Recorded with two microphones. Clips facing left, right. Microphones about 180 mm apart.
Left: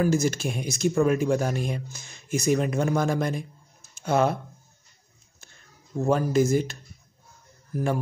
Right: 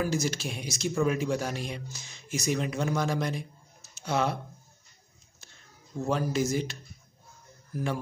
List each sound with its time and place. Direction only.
0.0 s speech: 50° left (ahead or behind)
6.0 s speech: 50° left (ahead or behind)